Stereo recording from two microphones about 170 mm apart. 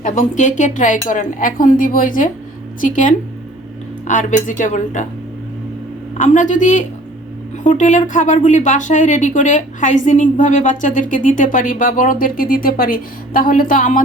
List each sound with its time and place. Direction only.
0.0 s speech: 45° left (ahead or behind)
6.1 s speech: 45° left (ahead or behind)